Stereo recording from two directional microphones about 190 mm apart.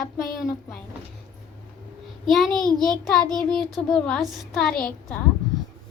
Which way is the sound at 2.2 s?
Centre (ahead or behind).